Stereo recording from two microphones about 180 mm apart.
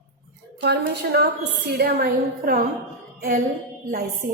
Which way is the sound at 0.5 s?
70° right (ahead or behind).